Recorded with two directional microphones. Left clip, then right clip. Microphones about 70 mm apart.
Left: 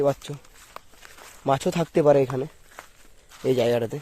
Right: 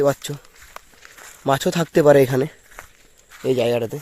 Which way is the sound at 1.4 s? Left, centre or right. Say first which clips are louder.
Right 4 dB; right.